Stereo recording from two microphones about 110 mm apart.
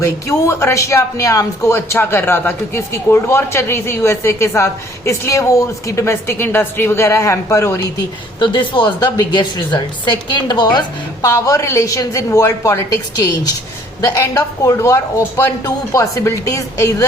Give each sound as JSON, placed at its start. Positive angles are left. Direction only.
{"t": 0.0, "sound": "speech", "side_deg": 25}
{"t": 8.4, "sound": "a woman's voice", "side_deg": 45}